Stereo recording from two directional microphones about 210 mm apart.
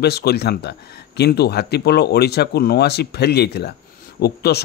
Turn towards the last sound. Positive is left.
turn(degrees=50)  # may be behind; listen again after turning